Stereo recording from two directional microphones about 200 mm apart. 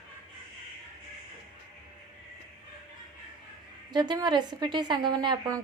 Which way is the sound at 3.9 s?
20° right (ahead or behind).